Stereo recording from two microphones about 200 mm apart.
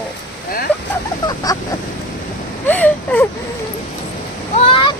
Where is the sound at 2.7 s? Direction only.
10° left (ahead or behind).